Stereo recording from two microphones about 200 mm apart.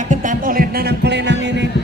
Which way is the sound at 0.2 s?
40° right (ahead or behind).